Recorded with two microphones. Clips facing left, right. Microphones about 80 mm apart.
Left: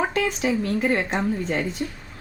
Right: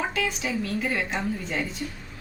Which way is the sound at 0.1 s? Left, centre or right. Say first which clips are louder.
Left 5 dB; left.